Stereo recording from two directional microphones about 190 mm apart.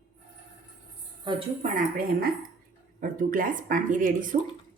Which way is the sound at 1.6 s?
45° right (ahead or behind).